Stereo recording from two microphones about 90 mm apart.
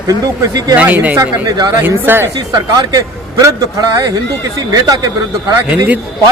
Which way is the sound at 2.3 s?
50° right (ahead or behind).